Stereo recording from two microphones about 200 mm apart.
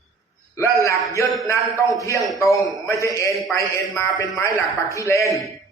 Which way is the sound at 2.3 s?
15° left (ahead or behind).